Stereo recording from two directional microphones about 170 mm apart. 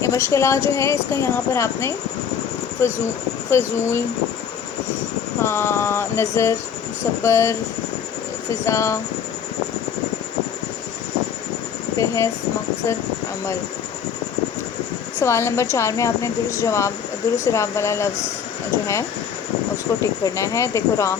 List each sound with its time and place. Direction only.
0.0 s a woman's voice: 15° left (ahead or behind)
5.4 s a woman's voice: 15° left (ahead or behind)
11.9 s a woman's voice: 20° left (ahead or behind)
15.2 s a woman's voice: 15° left (ahead or behind)
19.7 s a woman's voice: 20° left (ahead or behind)